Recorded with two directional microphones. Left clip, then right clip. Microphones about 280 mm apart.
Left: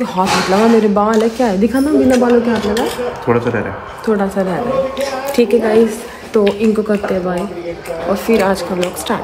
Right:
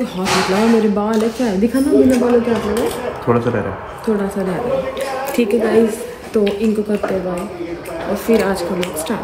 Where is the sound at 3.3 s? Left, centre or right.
Centre.